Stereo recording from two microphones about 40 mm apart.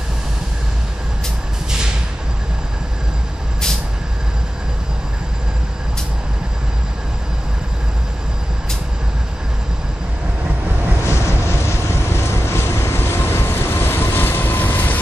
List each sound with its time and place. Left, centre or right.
11.1 s vehicle: left